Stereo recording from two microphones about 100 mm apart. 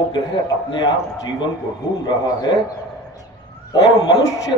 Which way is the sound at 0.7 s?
50° left (ahead or behind).